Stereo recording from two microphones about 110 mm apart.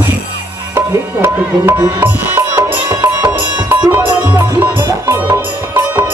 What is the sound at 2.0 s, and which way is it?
Music, 20° right (ahead or behind).